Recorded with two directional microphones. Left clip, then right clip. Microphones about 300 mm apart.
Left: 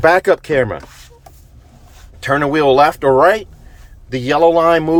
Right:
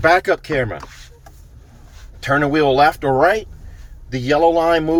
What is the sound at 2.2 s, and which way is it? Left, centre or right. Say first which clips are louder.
Speech: left 2 dB; centre.